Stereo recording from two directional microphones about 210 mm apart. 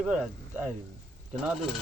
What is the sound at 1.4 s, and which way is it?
Speech, centre (ahead or behind).